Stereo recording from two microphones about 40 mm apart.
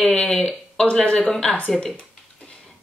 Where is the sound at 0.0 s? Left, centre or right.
Left.